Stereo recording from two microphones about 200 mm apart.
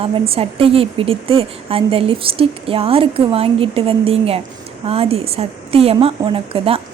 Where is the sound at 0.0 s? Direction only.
30° right (ahead or behind).